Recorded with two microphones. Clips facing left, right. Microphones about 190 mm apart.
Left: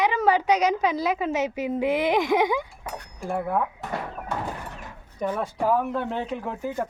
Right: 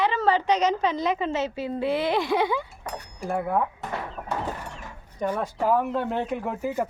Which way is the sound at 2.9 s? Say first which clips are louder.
Even; centre (ahead or behind).